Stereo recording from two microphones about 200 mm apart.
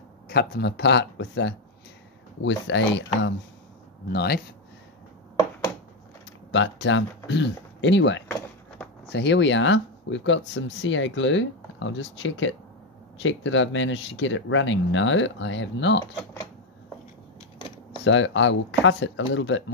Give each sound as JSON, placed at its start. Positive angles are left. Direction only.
{"t": 0.3, "sound": "speech", "side_deg": 55}
{"t": 4.1, "sound": "speech", "side_deg": 55}
{"t": 6.5, "sound": "speech", "side_deg": 70}
{"t": 18.0, "sound": "speech", "side_deg": 70}